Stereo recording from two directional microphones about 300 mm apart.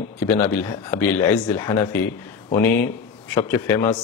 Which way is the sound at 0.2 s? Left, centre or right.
Centre.